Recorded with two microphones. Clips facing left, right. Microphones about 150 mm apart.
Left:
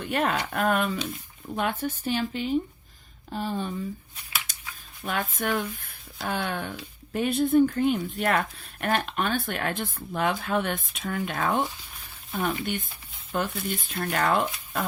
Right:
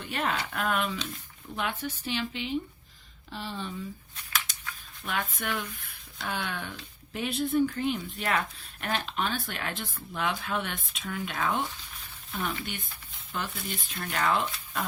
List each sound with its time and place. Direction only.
0.0 s speech: 50° left (ahead or behind)
5.0 s speech: 45° left (ahead or behind)